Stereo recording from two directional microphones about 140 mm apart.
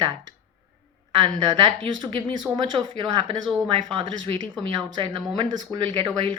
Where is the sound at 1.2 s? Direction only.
35° right (ahead or behind).